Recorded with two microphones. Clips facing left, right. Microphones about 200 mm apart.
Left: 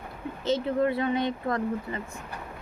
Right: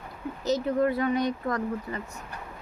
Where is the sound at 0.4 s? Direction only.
25° left (ahead or behind).